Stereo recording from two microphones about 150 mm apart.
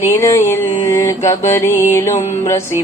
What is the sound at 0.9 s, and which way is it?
Mantra, 20° left (ahead or behind).